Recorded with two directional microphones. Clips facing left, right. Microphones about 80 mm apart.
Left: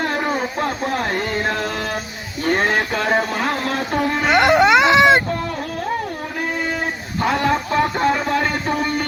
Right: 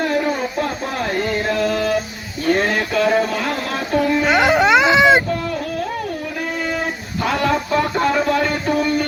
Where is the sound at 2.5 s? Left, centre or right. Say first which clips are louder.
Right 1 dB; left.